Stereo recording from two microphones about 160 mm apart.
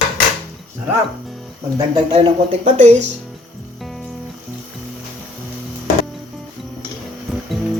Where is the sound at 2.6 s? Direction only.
45° right (ahead or behind).